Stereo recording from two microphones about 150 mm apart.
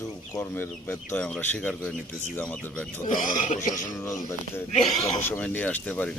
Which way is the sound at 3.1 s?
60° left (ahead or behind).